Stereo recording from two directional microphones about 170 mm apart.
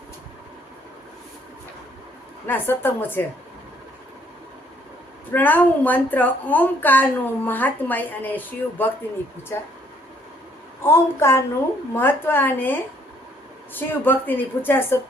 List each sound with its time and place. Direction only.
2.5 s a woman's voice: 10° left (ahead or behind)
5.3 s a woman's voice: 10° left (ahead or behind)
10.8 s a woman's voice: 15° left (ahead or behind)